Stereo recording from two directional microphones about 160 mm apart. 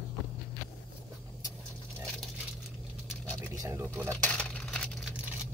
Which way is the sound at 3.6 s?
15° right (ahead or behind).